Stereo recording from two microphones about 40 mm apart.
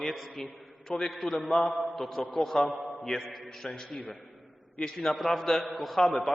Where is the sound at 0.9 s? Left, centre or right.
Centre.